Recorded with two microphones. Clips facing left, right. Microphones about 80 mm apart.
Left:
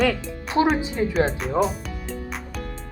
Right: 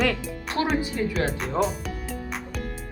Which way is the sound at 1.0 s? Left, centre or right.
Left.